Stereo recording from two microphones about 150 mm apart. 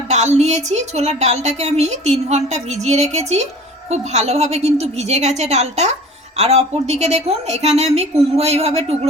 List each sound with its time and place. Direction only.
0.1 s a woman's voice: 50° right (ahead or behind)